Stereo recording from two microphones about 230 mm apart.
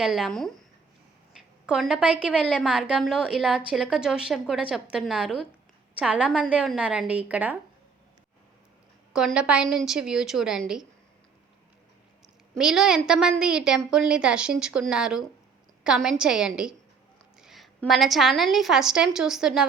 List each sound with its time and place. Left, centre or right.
0.0 s a woman's voice: centre
1.3 s a sound: centre
2.1 s a woman's voice: centre
9.1 s a woman's voice: centre
12.5 s a woman's voice: centre